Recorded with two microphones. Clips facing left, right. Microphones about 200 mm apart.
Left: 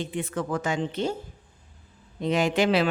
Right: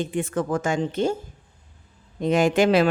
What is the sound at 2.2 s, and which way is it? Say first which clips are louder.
Speech: right 4 dB; 50° right (ahead or behind).